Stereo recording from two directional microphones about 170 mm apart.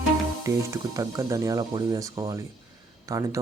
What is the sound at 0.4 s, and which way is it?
Speech, 20° right (ahead or behind).